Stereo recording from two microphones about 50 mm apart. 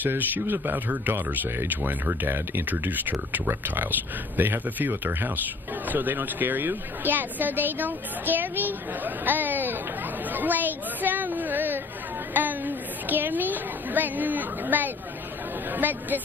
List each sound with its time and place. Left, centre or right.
0.0 s a woman's voice: right
12.4 s a sound: right
15.7 s speech: right